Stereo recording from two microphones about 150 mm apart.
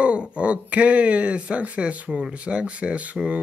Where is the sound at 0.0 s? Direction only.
10° right (ahead or behind).